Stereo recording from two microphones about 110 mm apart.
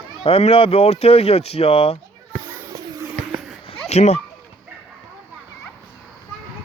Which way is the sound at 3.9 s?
90° left.